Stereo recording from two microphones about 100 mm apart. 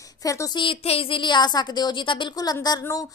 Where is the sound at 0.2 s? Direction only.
35° left (ahead or behind).